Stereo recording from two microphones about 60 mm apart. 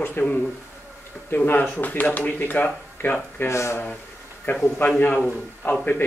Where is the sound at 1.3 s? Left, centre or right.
Left.